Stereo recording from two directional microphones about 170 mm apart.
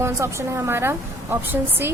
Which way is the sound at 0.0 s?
15° right (ahead or behind).